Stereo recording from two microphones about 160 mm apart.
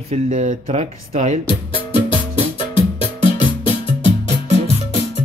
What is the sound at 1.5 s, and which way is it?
Music, 35° left (ahead or behind).